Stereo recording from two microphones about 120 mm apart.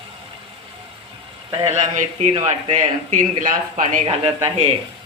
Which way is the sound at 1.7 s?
70° right (ahead or behind).